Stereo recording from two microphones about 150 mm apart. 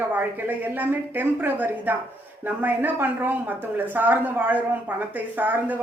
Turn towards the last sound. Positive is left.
turn(degrees=-10)  # may be behind; listen again after turning